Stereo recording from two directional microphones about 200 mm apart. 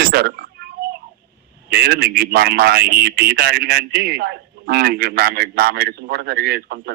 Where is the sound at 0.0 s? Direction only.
50° right (ahead or behind).